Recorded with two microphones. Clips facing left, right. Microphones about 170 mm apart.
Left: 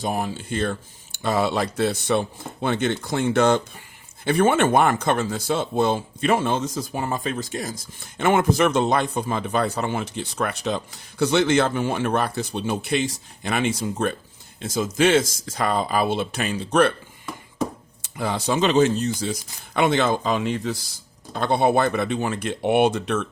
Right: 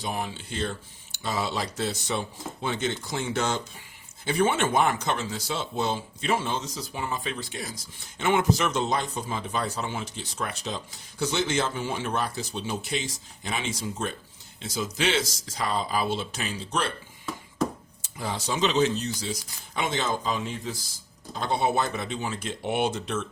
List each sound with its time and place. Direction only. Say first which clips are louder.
0.0 s speech: left 6 dB; 45° left (ahead or behind); by 16.9 s 60° left (ahead or behind)
18.0 s speech: left 7 dB; 65° left (ahead or behind)
19.7 s speech: left 8 dB; 65° left (ahead or behind)